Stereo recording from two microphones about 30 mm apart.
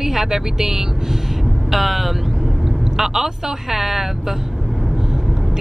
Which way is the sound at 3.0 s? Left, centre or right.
Centre.